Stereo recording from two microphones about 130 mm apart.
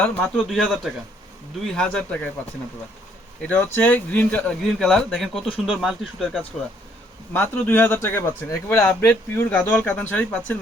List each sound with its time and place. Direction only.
0.3 s speech: 5° right (ahead or behind)
3.4 s speech: 10° left (ahead or behind)
7.3 s speech: 15° left (ahead or behind)